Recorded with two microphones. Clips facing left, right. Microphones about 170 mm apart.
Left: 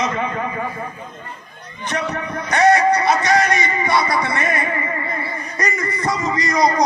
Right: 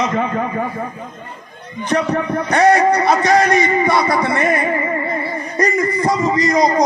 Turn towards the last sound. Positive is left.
turn(degrees=-25)  # may be behind; listen again after turning